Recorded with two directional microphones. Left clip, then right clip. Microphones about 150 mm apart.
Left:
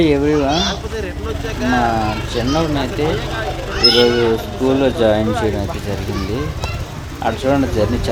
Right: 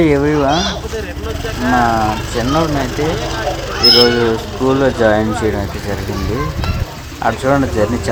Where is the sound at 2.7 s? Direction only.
90° right.